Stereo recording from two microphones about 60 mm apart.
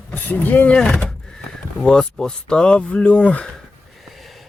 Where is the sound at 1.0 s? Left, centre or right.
Centre.